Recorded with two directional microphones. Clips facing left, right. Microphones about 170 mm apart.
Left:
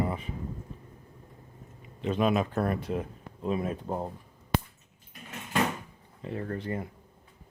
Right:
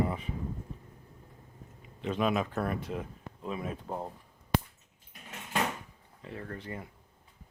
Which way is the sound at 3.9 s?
25° left (ahead or behind).